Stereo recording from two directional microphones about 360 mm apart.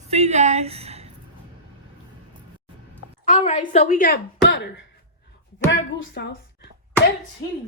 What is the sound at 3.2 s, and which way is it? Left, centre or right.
A woman's voice, centre.